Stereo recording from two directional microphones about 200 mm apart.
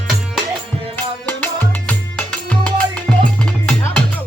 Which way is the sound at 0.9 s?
10° left (ahead or behind).